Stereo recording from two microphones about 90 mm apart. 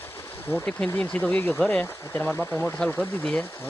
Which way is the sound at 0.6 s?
10° left (ahead or behind).